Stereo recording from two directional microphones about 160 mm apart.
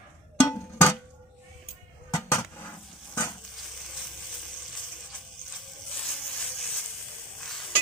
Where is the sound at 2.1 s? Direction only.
15° left (ahead or behind).